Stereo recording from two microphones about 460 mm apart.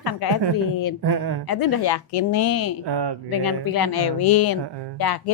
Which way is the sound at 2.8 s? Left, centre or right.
Right.